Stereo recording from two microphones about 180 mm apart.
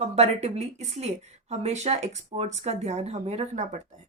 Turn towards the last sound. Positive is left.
turn(degrees=-40)  # may be behind; listen again after turning